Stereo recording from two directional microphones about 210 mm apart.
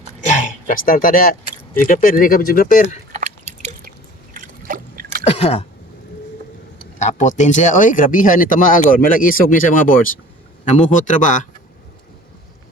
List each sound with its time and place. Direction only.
0.3 s a sound: 35° left (ahead or behind)
1.8 s speech: 40° left (ahead or behind)
3.1 s chewing: 35° right (ahead or behind)
3.6 s drip: 35° right (ahead or behind)
4.4 s a sound: 40° right (ahead or behind)
5.2 s chewing: 30° left (ahead or behind)
7.0 s speech: 35° left (ahead or behind)